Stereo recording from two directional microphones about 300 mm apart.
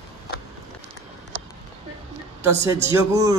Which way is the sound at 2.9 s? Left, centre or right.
Centre.